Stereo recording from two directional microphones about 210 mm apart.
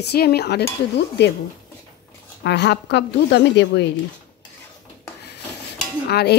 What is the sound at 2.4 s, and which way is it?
Speech, 55° left (ahead or behind).